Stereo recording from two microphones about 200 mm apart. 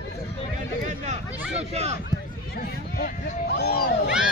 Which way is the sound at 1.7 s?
35° right (ahead or behind).